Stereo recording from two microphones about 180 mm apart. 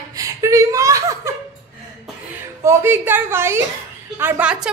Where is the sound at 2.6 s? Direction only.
15° right (ahead or behind).